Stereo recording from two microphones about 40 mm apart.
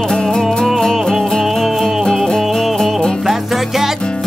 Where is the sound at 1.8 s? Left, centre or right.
Centre.